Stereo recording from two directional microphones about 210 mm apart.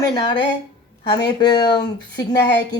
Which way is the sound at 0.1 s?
20° left (ahead or behind).